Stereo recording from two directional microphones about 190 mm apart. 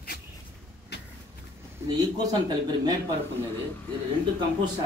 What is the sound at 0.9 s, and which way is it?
Vehicle, 65° left (ahead or behind).